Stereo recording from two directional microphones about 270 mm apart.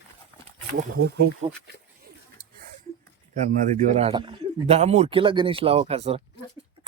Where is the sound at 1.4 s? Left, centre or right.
Right.